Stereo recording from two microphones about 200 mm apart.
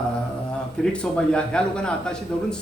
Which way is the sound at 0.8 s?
5° left (ahead or behind).